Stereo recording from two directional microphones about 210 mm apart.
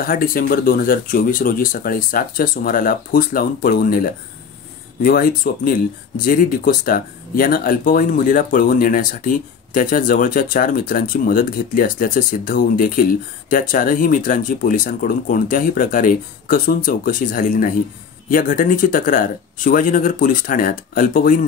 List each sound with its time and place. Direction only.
0.0 s speech: 45° left (ahead or behind)